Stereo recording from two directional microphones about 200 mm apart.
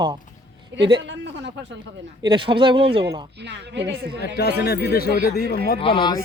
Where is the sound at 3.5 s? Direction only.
60° right (ahead or behind).